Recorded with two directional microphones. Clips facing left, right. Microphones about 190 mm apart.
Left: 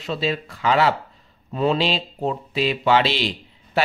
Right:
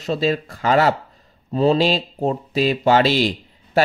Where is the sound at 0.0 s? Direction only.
45° right (ahead or behind).